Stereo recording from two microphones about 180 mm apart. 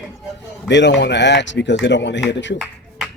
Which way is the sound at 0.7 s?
80° left.